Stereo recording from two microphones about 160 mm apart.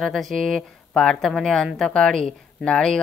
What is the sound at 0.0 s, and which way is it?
Speech, centre (ahead or behind).